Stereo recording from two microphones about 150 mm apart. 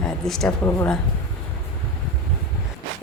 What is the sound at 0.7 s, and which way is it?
Speech, 15° left (ahead or behind).